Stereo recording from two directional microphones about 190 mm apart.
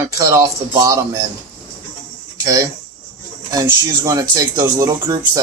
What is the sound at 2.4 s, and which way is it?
Speech, 20° right (ahead or behind).